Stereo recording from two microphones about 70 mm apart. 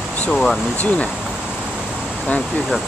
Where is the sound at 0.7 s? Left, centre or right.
Left.